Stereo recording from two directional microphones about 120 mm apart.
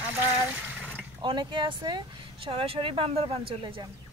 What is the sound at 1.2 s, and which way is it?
Speech, 40° right (ahead or behind).